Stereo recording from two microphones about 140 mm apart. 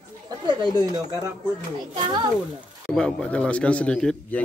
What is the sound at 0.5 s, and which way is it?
Speech, 30° right (ahead or behind).